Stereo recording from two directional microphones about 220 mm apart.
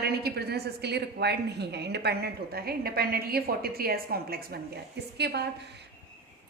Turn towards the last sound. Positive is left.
turn(degrees=-50)  # may be behind; listen again after turning